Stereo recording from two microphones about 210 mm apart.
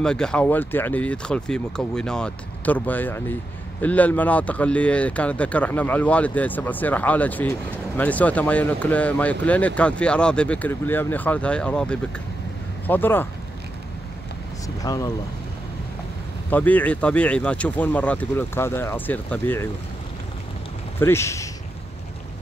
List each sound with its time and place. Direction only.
0.0 s speech: 5° left (ahead or behind)
14.8 s speech: 15° left (ahead or behind)
16.4 s speech: 10° left (ahead or behind)
21.0 s speech: 10° left (ahead or behind)